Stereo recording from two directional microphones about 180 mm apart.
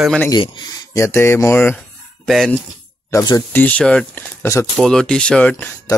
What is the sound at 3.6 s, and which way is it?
Speech, 5° left (ahead or behind).